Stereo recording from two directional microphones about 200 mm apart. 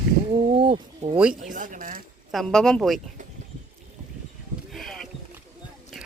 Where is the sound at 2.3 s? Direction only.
Centre (ahead or behind).